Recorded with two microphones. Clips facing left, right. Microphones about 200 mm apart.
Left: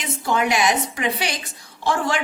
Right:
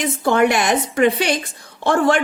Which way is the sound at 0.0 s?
55° right (ahead or behind).